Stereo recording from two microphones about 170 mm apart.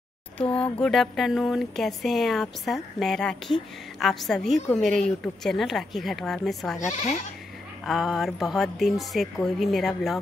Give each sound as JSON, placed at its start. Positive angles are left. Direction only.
{"t": 0.4, "sound": "speech", "side_deg": 5}
{"t": 6.8, "sound": "speech", "side_deg": 45}
{"t": 7.8, "sound": "speech", "side_deg": 0}